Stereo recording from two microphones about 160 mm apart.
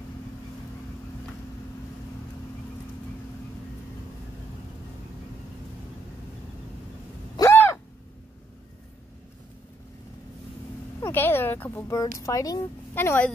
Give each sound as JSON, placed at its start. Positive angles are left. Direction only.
{"t": 7.3, "sound": "gasp", "side_deg": 15}
{"t": 11.0, "sound": "speech", "side_deg": 15}